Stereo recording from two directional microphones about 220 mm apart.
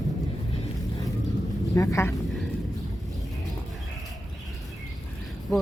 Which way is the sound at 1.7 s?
15° left (ahead or behind).